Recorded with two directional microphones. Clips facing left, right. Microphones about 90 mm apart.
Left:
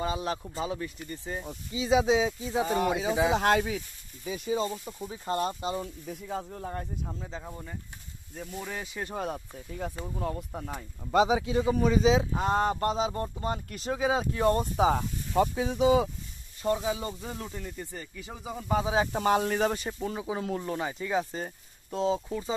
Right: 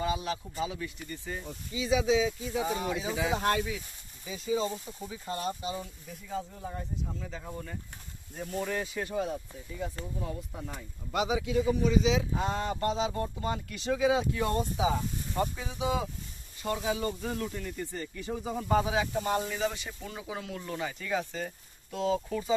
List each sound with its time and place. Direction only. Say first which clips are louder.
0.0 s speech: left 1 dB; 35° left (ahead or behind)
2.7 s speech: left 5 dB; 65° left (ahead or behind)
4.3 s speech: left 1 dB; 50° left (ahead or behind)
7.2 s speech: left 1 dB; 25° left (ahead or behind)
8.5 s speech: right 5 dB; 5° left (ahead or behind)
9.2 s speech: even; 55° left (ahead or behind)
11.1 s speech: left 6 dB; 35° left (ahead or behind); by 16.1 s 65° left (ahead or behind)
16.6 s speech: left 2 dB; 20° left (ahead or behind)
17.9 s speech: right 5 dB; 5° left (ahead or behind)
19.2 s speech: left 5 dB; 70° left (ahead or behind); by 22.5 s 25° left (ahead or behind)